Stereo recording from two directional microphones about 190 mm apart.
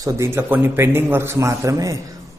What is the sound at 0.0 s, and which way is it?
A man's voice, 15° right (ahead or behind).